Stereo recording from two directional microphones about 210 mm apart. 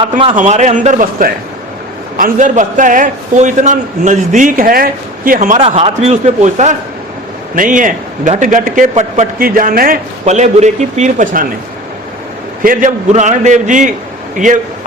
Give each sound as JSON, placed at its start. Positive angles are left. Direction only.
{"t": 0.2, "sound": "a man's voice", "side_deg": -30}
{"t": 12.6, "sound": "a man's voice", "side_deg": -35}